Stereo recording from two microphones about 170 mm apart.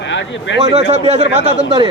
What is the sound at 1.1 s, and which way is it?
Speech, 40° right (ahead or behind).